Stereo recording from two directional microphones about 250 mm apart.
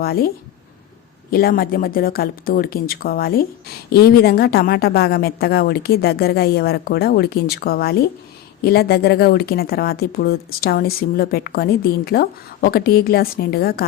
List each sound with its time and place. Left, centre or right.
0.0 s a woman's voice: left
1.3 s a woman's voice: left